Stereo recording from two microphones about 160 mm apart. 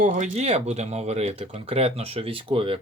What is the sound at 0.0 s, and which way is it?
Speech, 45° right (ahead or behind).